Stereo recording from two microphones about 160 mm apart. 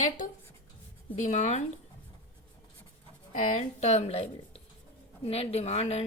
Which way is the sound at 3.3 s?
50° left (ahead or behind).